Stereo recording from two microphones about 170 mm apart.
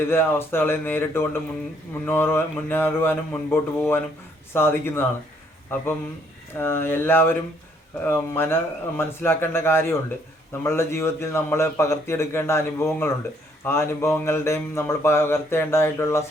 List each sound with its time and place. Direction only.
0.0 s speech: 15° left (ahead or behind)
6.6 s speech: 15° left (ahead or behind)